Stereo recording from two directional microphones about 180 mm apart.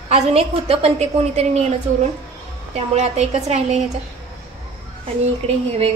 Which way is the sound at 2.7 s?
35° right (ahead or behind).